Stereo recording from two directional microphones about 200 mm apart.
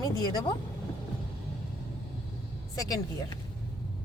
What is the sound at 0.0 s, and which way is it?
Speech, 20° left (ahead or behind).